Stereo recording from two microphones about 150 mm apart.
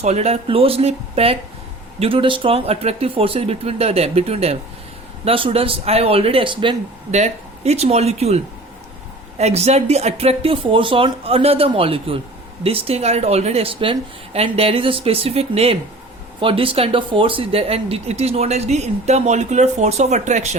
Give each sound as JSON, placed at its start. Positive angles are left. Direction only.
{"t": 0.0, "sound": "speech", "side_deg": -45}
{"t": 7.1, "sound": "speech", "side_deg": -45}
{"t": 9.4, "sound": "speech", "side_deg": -45}